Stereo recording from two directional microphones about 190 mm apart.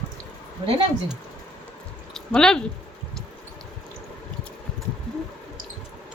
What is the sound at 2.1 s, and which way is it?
Speech, 5° left (ahead or behind).